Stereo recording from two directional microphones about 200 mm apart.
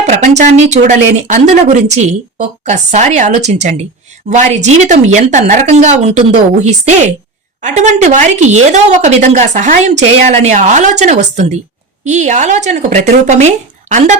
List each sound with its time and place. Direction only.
0.0 s speech: 35° right (ahead or behind)